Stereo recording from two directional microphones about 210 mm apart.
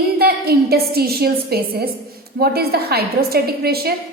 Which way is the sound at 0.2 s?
45° right (ahead or behind).